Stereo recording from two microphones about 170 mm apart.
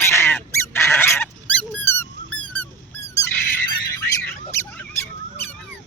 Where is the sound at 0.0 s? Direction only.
15° left (ahead or behind).